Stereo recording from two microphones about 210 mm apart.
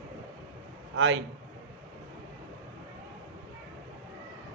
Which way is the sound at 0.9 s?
60° right (ahead or behind).